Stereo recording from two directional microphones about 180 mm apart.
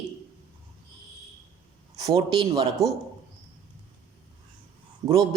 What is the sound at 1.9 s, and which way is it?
Speech, 20° right (ahead or behind).